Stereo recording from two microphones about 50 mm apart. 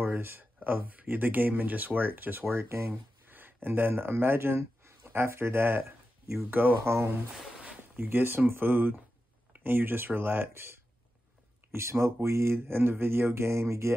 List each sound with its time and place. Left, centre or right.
0.0 s a sound: right
0.6 s speech: right
2.4 s speech: right
2.9 s a sound: right
3.6 s speech: right
6.5 s speech: right
6.8 s speech: right
8.0 s speech: right
11.7 s speech: right